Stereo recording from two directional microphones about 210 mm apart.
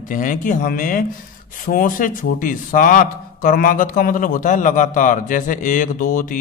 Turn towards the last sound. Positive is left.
turn(degrees=40)  # may be behind; listen again after turning